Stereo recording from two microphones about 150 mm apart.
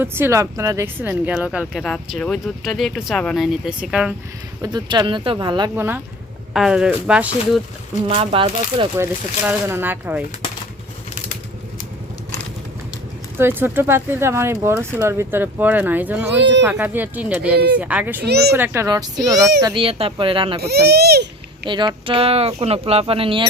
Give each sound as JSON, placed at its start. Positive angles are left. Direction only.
{"t": 0.0, "sound": "a child's voice", "side_deg": -15}
{"t": 1.5, "sound": "speech", "side_deg": 0}
{"t": 4.6, "sound": "a child's voice", "side_deg": -30}
{"t": 5.7, "sound": "speech", "side_deg": -15}
{"t": 6.5, "sound": "speech", "side_deg": -5}
{"t": 8.0, "sound": "speech", "side_deg": -40}
{"t": 9.4, "sound": "speech", "side_deg": -15}
{"t": 13.4, "sound": "speech", "side_deg": -15}
{"t": 18.3, "sound": "speech", "side_deg": -90}
{"t": 18.5, "sound": "a child's voice", "side_deg": -15}
{"t": 19.8, "sound": "speech", "side_deg": -40}
{"t": 20.6, "sound": "speech", "side_deg": -90}
{"t": 21.7, "sound": "speech", "side_deg": -30}